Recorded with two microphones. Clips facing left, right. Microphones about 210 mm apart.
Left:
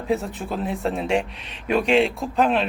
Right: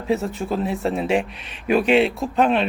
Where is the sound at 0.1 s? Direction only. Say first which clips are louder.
Right 3 dB; centre (ahead or behind).